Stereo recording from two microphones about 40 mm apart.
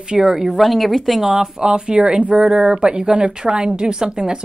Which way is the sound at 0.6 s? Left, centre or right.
Centre.